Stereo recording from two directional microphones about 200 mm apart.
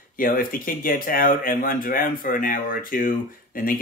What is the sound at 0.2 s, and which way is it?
Speech, 45° left (ahead or behind).